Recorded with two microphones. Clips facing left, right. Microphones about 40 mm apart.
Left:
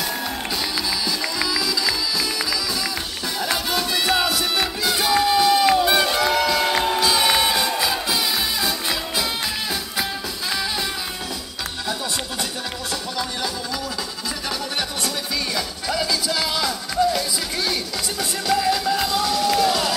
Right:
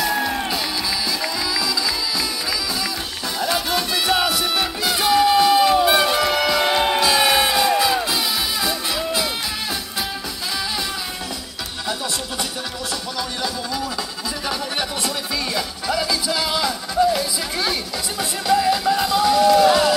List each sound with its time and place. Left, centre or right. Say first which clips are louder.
1.2 s music: even; centre
3.3 s music: right 2 dB; centre
6.6 s music: right 2 dB; right
7.0 s music: right 1 dB; centre
15.5 s music: right 3 dB; centre